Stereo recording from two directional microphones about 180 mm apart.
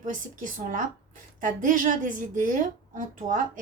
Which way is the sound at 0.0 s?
45° right (ahead or behind).